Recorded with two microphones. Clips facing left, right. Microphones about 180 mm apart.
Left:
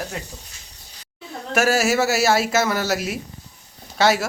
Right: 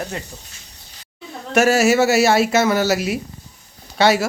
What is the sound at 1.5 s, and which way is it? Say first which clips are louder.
Speech: right 4 dB; centre (ahead or behind).